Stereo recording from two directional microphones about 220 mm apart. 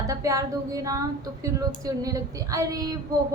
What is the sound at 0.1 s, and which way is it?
A woman's voice, 15° right (ahead or behind).